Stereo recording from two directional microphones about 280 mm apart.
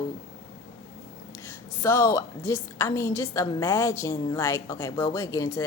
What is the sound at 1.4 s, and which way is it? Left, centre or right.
A woman's voice, centre.